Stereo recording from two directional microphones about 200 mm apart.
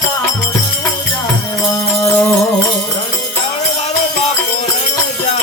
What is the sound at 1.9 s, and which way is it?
Music, 10° left (ahead or behind).